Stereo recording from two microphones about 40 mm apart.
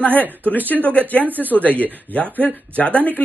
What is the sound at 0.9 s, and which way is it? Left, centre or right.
Speech, left.